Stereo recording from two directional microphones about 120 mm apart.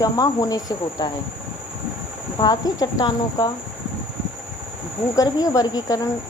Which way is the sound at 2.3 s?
35° left (ahead or behind).